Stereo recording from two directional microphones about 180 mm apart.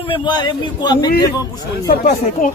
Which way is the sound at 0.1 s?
25° left (ahead or behind).